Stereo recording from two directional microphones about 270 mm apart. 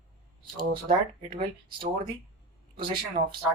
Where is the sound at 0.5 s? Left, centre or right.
Right.